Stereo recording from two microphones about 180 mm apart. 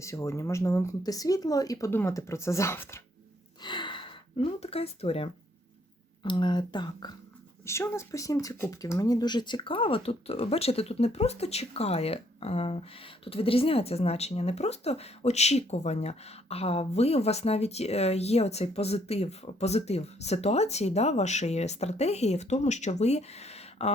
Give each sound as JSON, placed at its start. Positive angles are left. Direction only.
{"t": 0.0, "sound": "speech", "side_deg": 15}
{"t": 3.6, "sound": "a sound", "side_deg": 25}
{"t": 6.2, "sound": "speech", "side_deg": 25}